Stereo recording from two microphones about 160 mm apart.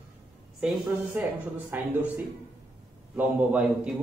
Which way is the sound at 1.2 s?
10° right (ahead or behind).